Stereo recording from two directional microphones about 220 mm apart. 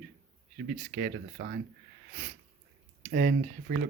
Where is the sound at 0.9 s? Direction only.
45° right (ahead or behind).